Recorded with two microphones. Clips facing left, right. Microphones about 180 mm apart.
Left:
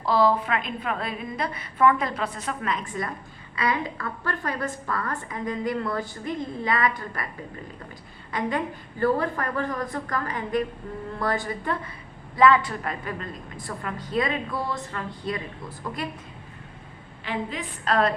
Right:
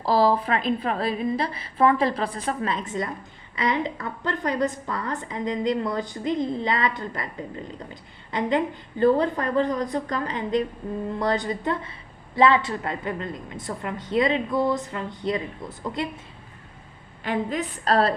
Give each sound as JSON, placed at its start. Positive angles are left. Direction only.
{"t": 0.0, "sound": "a woman's voice", "side_deg": -35}
{"t": 17.2, "sound": "a woman's voice", "side_deg": -45}